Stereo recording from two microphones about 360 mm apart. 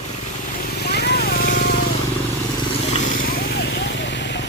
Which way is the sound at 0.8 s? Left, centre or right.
Left.